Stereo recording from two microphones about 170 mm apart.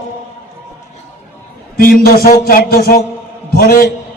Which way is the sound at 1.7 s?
60° left (ahead or behind).